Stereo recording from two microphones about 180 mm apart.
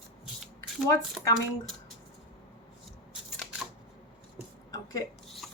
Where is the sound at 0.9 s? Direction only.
15° left (ahead or behind).